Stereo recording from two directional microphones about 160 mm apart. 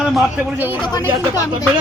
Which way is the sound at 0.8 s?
25° left (ahead or behind).